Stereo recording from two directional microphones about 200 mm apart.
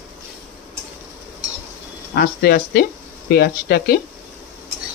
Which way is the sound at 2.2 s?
50° left (ahead or behind).